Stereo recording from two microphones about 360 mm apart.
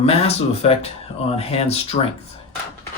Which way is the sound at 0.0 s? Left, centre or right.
Centre.